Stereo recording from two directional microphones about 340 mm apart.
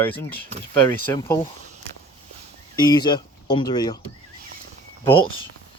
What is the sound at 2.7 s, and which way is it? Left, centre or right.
Speech, centre.